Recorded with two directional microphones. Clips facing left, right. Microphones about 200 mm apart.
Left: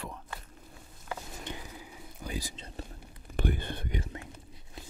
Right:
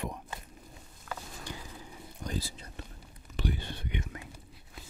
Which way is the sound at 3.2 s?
55° left (ahead or behind).